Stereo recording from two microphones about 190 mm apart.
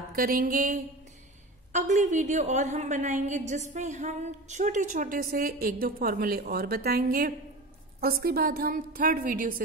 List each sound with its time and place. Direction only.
0.1 s a woman's voice: 50° right (ahead or behind)